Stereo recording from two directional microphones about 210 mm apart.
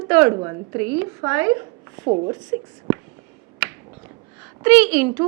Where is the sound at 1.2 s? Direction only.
15° right (ahead or behind).